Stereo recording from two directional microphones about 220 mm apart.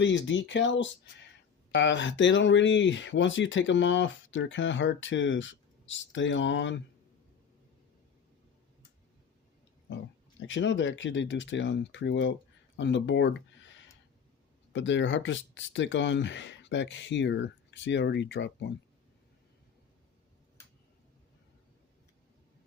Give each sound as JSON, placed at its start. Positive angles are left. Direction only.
{"t": 0.0, "sound": "speech", "side_deg": 55}
{"t": 10.4, "sound": "speech", "side_deg": 55}